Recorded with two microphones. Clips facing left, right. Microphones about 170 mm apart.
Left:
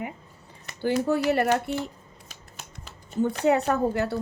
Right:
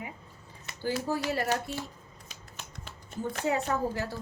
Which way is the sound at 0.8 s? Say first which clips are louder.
Left 7 dB; 65° left (ahead or behind).